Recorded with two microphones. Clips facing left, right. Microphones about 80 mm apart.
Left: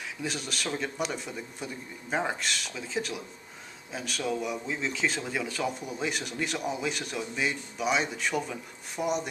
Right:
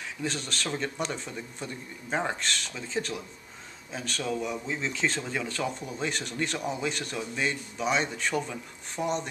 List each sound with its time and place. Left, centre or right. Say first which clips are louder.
0.2 s speech: right 1 dB; centre